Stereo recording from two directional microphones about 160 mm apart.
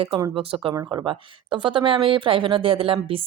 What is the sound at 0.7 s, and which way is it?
Speech, 25° right (ahead or behind).